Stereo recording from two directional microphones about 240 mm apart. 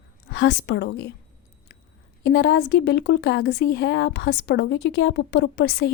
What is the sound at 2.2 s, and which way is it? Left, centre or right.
Speech, left.